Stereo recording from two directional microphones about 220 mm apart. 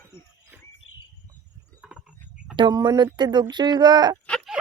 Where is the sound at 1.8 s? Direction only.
Centre (ahead or behind).